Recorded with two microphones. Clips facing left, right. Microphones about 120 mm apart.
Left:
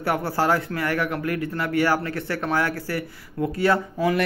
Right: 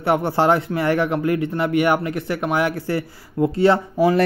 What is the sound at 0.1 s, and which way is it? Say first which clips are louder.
Speech: right 5 dB; 25° right (ahead or behind).